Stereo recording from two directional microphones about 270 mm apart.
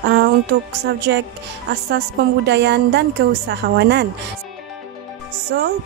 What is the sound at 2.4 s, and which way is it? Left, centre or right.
A woman's voice, right.